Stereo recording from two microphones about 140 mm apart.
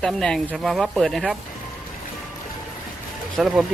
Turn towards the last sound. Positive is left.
turn(degrees=-5)  # may be behind; listen again after turning